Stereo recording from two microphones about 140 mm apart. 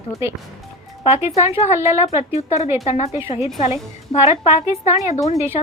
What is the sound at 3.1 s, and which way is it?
Speech, 20° right (ahead or behind).